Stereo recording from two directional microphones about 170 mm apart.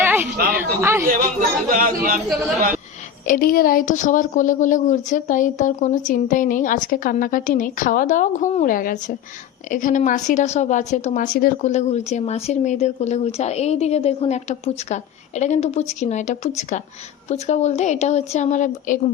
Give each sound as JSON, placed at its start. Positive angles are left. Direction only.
{"t": 0.0, "sound": "a sound", "side_deg": -10}
{"t": 0.5, "sound": "speech", "side_deg": -15}
{"t": 1.0, "sound": "speech", "side_deg": -55}
{"t": 3.2, "sound": "a woman's voice", "side_deg": 60}